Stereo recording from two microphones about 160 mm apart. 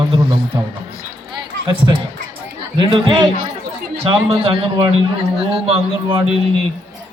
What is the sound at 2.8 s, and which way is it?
A man's voice, 35° right (ahead or behind).